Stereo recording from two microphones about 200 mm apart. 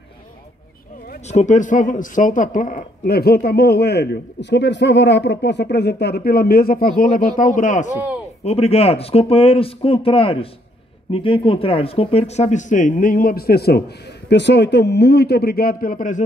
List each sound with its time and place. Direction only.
1.2 s speech: 35° left (ahead or behind)